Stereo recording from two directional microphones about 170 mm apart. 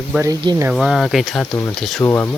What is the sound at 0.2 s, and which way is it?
Speech, 20° right (ahead or behind).